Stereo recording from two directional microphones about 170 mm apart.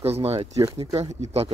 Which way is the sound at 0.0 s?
35° right (ahead or behind).